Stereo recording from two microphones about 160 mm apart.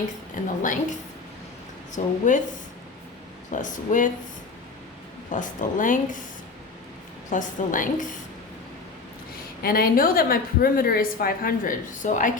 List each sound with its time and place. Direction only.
0.4 s a woman's voice: 55° left (ahead or behind)
1.9 s a woman's voice: 50° left (ahead or behind)
3.5 s a woman's voice: 50° left (ahead or behind)
5.3 s a woman's voice: 55° left (ahead or behind)
7.3 s a woman's voice: 55° left (ahead or behind)
9.6 s a woman's voice: 65° left (ahead or behind)